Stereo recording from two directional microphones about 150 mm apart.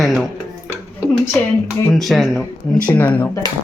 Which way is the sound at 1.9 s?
Centre (ahead or behind).